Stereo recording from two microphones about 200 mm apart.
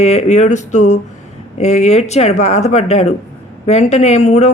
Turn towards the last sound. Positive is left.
turn(degrees=35)  # may be behind; listen again after turning